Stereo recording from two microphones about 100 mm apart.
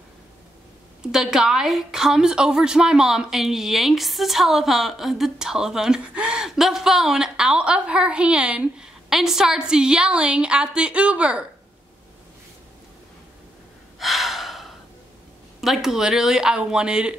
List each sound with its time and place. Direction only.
1.1 s a woman's voice: 5° right (ahead or behind)
13.9 s gasp: centre (ahead or behind)
15.6 s a woman's voice: 5° right (ahead or behind)